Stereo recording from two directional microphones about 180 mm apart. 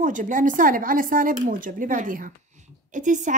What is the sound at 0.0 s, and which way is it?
A child's voice, 45° right (ahead or behind).